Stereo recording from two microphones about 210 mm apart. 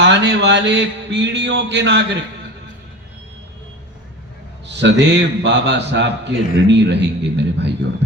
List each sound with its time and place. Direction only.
0.0 s a man's voice: 55° right (ahead or behind)
4.6 s a man's voice: 55° right (ahead or behind)